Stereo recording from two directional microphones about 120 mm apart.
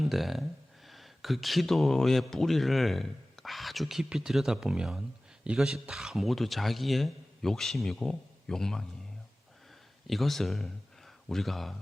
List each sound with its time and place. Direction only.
0.0 s speech: centre (ahead or behind)
10.1 s speech: centre (ahead or behind)